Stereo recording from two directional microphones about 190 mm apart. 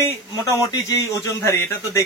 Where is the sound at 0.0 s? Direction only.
15° left (ahead or behind).